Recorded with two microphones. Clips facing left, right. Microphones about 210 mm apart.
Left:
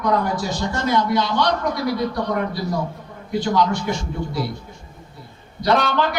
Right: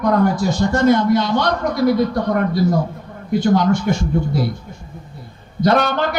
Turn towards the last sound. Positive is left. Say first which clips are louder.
# right 3 dB
turn(degrees=-50)  # may be behind; listen again after turning